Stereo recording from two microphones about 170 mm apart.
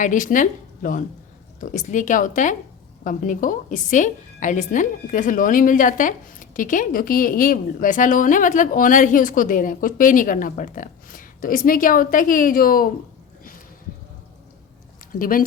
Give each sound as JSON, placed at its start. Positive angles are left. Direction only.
{"t": 0.0, "sound": "a woman's voice", "side_deg": 50}
{"t": 15.2, "sound": "speech", "side_deg": 55}